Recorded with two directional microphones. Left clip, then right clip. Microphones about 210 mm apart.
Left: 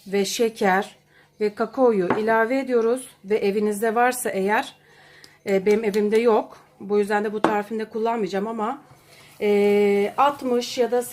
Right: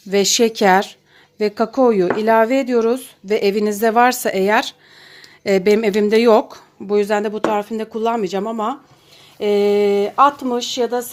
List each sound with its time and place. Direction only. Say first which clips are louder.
0.1 s speech: right 7 dB; 45° right (ahead or behind)